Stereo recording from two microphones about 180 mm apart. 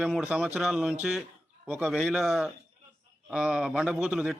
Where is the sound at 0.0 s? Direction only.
5° right (ahead or behind).